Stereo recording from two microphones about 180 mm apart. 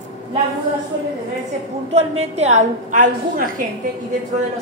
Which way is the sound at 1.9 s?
35° right (ahead or behind).